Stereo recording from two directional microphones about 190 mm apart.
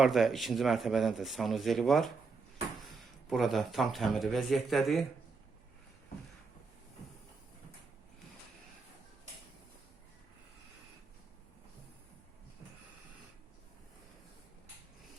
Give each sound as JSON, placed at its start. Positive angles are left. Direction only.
{"t": 0.0, "sound": "speech", "side_deg": 0}
{"t": 3.2, "sound": "speech", "side_deg": 0}